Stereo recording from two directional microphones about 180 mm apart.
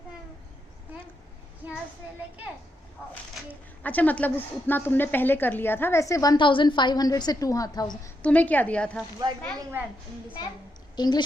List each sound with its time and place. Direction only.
3.5 s a woman's voice: 10° left (ahead or behind)
8.2 s a woman's voice: 10° left (ahead or behind)
10.9 s a woman's voice: 25° left (ahead or behind)